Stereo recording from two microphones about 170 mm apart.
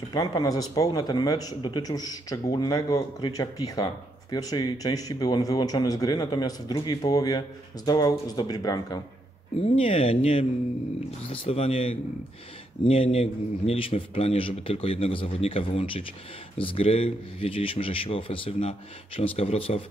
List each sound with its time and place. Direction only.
0.1 s speech: 25° left (ahead or behind)
9.6 s a man's voice: 35° left (ahead or behind)